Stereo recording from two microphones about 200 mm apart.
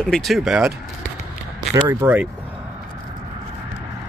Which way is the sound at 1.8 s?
10° right (ahead or behind).